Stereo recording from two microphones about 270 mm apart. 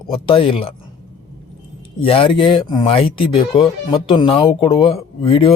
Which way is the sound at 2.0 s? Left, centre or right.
Left.